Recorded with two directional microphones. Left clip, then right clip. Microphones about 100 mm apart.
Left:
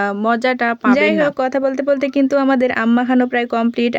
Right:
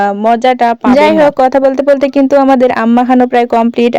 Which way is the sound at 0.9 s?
45° right (ahead or behind).